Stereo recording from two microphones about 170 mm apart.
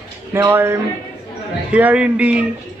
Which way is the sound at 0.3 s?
15° right (ahead or behind).